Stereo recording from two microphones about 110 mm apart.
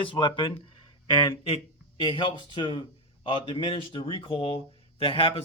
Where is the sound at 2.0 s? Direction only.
50° left (ahead or behind).